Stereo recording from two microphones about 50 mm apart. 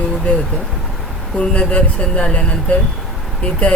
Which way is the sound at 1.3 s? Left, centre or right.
Left.